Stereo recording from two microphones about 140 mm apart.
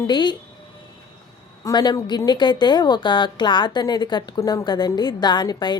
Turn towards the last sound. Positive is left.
turn(degrees=30)  # may be behind; listen again after turning